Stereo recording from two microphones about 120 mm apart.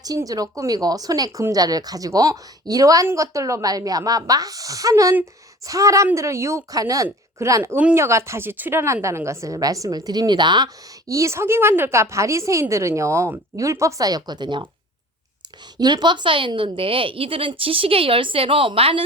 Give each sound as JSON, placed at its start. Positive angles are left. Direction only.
{"t": 0.0, "sound": "speech", "side_deg": -30}
{"t": 11.1, "sound": "speech", "side_deg": -25}
{"t": 15.8, "sound": "a woman's voice", "side_deg": -35}